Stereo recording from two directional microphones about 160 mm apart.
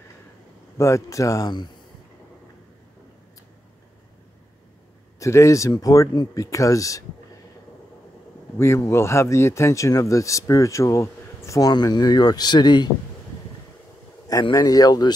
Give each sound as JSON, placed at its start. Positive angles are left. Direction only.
{"t": 0.7, "sound": "speech", "side_deg": 20}
{"t": 5.2, "sound": "speech", "side_deg": 20}
{"t": 8.5, "sound": "speech", "side_deg": 20}
{"t": 14.4, "sound": "speech", "side_deg": 25}